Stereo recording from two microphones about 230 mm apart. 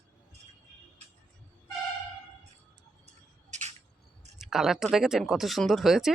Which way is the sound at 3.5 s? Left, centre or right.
Right.